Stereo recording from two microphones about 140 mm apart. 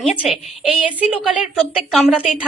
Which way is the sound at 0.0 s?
5° right (ahead or behind).